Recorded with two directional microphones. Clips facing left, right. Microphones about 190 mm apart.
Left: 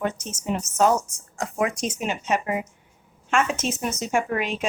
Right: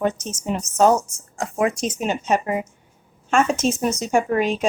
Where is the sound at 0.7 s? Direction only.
10° left (ahead or behind).